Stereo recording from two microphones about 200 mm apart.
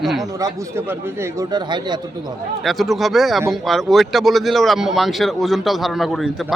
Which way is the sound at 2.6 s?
Centre (ahead or behind).